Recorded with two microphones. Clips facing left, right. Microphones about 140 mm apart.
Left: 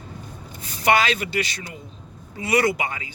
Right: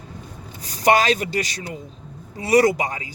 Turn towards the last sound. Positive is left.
turn(degrees=-40)  # may be behind; listen again after turning